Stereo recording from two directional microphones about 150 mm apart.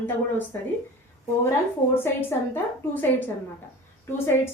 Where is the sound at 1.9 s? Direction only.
15° left (ahead or behind).